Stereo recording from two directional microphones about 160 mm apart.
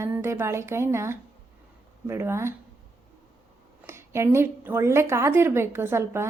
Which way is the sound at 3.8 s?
15° right (ahead or behind).